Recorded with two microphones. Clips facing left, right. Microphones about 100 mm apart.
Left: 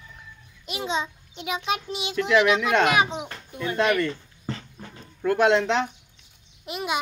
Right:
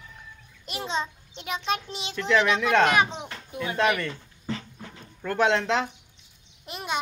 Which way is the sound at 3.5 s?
15° right (ahead or behind).